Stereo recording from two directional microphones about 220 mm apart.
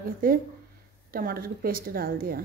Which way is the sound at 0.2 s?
40° right (ahead or behind).